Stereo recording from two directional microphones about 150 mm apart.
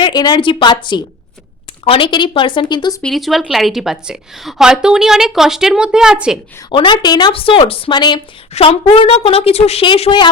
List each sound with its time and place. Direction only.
0.0 s a woman's voice: 30° left (ahead or behind)
3.0 s a woman's voice: centre (ahead or behind)
6.7 s a woman's voice: 30° left (ahead or behind)